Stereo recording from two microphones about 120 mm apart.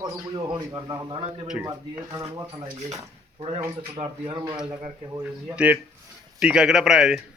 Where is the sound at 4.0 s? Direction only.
50° right (ahead or behind).